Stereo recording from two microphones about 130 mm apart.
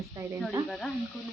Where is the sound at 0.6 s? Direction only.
Centre (ahead or behind).